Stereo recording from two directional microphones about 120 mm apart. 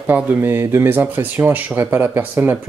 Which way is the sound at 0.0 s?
15° right (ahead or behind).